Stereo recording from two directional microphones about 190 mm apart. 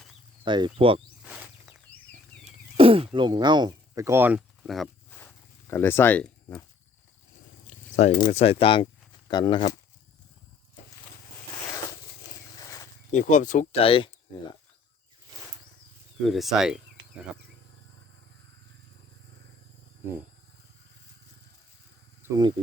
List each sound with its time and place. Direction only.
0.4 s speech: 25° right (ahead or behind)
1.2 s a sound: 5° right (ahead or behind)
2.4 s a sound: 30° right (ahead or behind); by 6.7 s 10° left (ahead or behind)
7.9 s speech: 35° left (ahead or behind)
12.5 s a sound: 15° left (ahead or behind)
13.1 s speech: 40° left (ahead or behind)
13.8 s speech: 30° left (ahead or behind)
16.2 s speech: centre (ahead or behind)
22.2 s speech: 20° right (ahead or behind)